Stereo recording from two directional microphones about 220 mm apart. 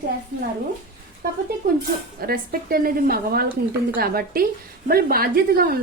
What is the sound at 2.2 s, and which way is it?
A woman's voice, 45° right (ahead or behind).